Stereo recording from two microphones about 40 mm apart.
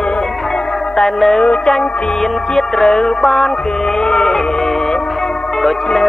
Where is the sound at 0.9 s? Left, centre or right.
Centre.